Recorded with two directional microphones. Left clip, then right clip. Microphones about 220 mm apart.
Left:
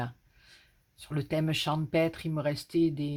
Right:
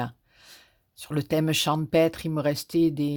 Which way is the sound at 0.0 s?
45° right (ahead or behind).